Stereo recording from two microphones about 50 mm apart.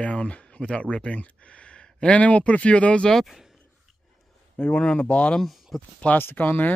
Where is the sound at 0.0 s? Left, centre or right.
Left.